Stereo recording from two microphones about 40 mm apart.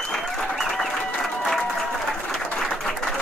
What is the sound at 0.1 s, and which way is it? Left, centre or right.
Applause, centre.